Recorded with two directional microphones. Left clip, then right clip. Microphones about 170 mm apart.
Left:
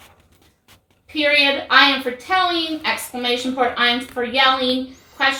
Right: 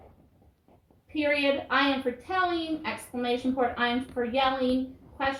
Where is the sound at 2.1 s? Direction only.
35° left (ahead or behind).